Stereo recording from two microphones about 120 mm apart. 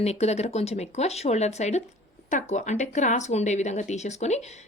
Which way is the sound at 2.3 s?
85° left.